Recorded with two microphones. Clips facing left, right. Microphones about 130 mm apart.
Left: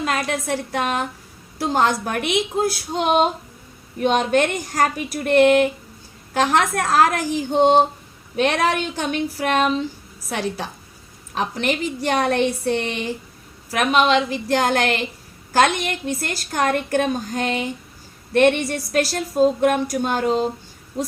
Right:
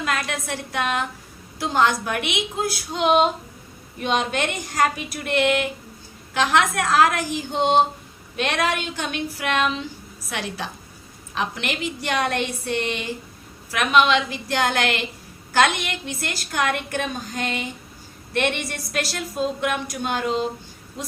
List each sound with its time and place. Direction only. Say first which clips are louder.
0.0 s a woman's voice: left 3 dB; 35° left (ahead or behind)